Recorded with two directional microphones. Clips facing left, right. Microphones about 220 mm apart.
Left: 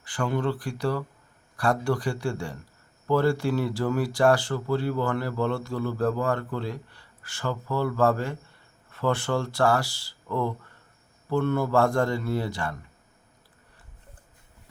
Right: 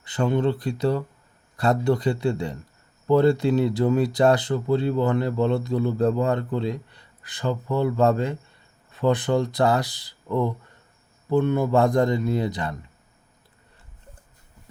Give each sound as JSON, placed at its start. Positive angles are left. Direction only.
{"t": 0.0, "sound": "speech", "side_deg": -20}